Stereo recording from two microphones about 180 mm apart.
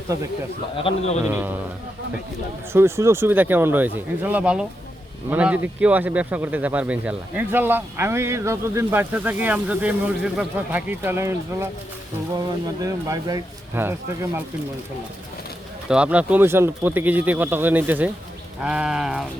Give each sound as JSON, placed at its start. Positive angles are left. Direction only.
{"t": 0.8, "sound": "a man's voice", "side_deg": 35}
{"t": 2.7, "sound": "speech", "side_deg": -15}
{"t": 12.8, "sound": "speech", "side_deg": -20}
{"t": 15.9, "sound": "speech", "side_deg": -5}
{"t": 18.6, "sound": "sheep", "side_deg": -5}